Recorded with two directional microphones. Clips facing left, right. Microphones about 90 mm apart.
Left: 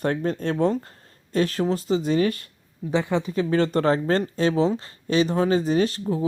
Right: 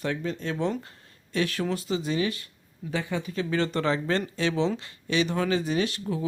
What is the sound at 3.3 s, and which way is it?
Speech, 25° left (ahead or behind).